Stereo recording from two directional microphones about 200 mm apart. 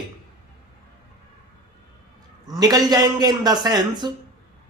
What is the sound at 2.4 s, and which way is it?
Speech, 20° right (ahead or behind).